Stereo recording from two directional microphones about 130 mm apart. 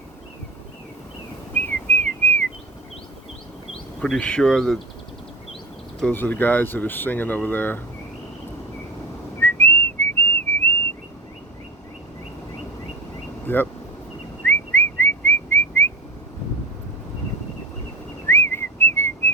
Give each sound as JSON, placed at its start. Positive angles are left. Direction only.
{"t": 1.6, "sound": "whistling", "side_deg": 15}
{"t": 4.0, "sound": "speech", "side_deg": 5}
{"t": 6.0, "sound": "speech", "side_deg": 10}
{"t": 9.4, "sound": "whistling", "side_deg": 15}
{"t": 13.5, "sound": "speech", "side_deg": 15}
{"t": 14.4, "sound": "whistling", "side_deg": 15}
{"t": 18.3, "sound": "whistling", "side_deg": 20}